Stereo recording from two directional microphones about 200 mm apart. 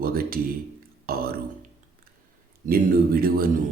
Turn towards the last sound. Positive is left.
turn(degrees=-50)  # may be behind; listen again after turning